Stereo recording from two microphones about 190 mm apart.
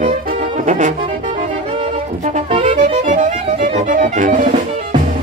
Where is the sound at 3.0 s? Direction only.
40° right (ahead or behind).